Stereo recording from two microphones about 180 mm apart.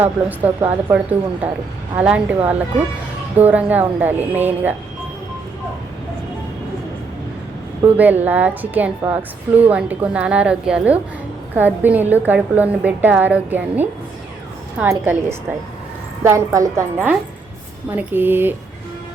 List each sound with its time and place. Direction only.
0.0 s a woman's voice: 10° right (ahead or behind)
7.8 s a woman's voice: 10° right (ahead or behind)